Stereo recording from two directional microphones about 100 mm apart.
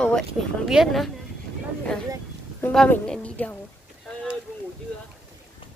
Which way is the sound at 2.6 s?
20° left (ahead or behind).